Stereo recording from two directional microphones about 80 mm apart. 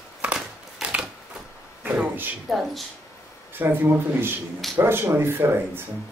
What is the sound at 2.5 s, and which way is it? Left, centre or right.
Speech, centre.